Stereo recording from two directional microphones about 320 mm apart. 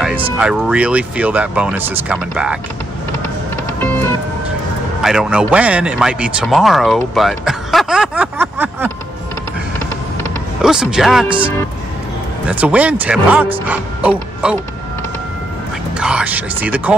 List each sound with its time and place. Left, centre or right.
0.4 s a man's voice: centre
3.8 s music: centre
5.0 s a man's voice: centre
10.6 s a man's voice: centre
11.2 s speech: centre
12.4 s a man's voice: centre
16.0 s a man's voice: centre